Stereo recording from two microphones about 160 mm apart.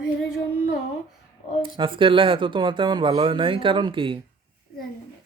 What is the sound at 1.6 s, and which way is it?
Speech, 30° right (ahead or behind).